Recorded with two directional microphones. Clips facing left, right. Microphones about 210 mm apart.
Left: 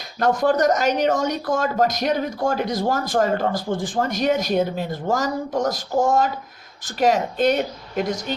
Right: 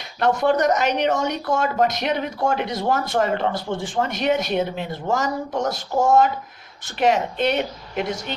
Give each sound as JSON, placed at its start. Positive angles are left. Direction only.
{"t": 0.2, "sound": "speech", "side_deg": 40}